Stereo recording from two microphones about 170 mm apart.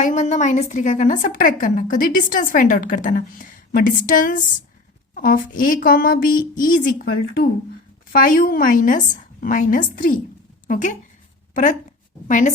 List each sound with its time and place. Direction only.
0.0 s a woman's voice: 45° left (ahead or behind)
8.1 s a woman's voice: 55° left (ahead or behind)
12.3 s a woman's voice: 45° left (ahead or behind)